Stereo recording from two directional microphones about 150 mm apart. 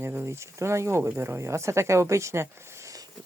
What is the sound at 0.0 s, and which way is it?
Speech, 15° right (ahead or behind).